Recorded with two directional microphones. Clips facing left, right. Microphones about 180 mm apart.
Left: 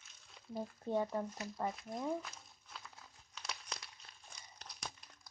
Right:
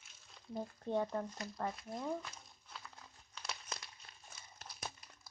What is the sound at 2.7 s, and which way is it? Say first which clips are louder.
Crumpling: right 1 dB; centre (ahead or behind).